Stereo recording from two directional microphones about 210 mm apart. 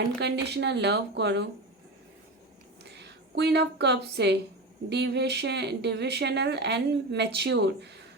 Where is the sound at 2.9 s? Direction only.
55° right (ahead or behind).